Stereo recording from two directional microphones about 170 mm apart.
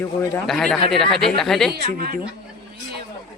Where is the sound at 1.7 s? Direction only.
60° right (ahead or behind).